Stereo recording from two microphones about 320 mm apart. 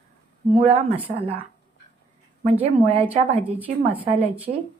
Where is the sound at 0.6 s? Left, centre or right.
Centre.